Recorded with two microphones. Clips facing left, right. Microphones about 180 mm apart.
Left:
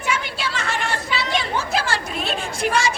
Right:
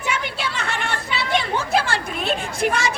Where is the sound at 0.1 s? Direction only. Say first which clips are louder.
Left 1 dB; 60° right (ahead or behind).